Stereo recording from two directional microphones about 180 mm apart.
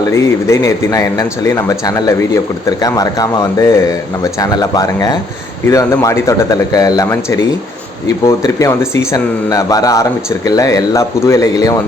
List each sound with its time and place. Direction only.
0.0 s speech: 15° left (ahead or behind)